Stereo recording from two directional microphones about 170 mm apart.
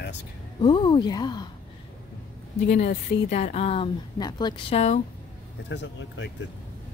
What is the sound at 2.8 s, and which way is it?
A woman's voice, 45° left (ahead or behind).